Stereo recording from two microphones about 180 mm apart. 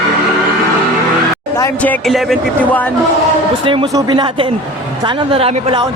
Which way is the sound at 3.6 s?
25° right (ahead or behind).